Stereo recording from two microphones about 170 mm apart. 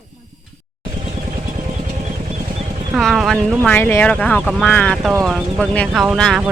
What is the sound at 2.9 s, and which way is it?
Speech, centre (ahead or behind).